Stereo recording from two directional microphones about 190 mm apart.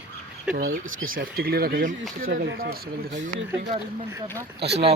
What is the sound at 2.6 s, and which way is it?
Speech, 65° right (ahead or behind).